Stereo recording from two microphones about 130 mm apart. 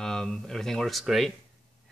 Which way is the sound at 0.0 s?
5° left (ahead or behind).